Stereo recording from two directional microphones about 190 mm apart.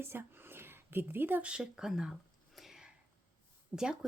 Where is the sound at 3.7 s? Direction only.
10° right (ahead or behind).